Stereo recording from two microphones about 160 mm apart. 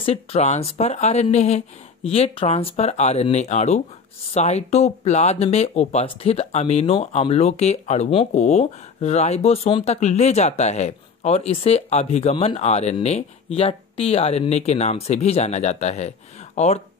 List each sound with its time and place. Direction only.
0.0 s speech: 40° left (ahead or behind)